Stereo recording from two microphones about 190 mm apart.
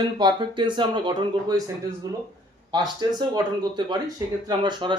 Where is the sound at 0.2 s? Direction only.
25° right (ahead or behind).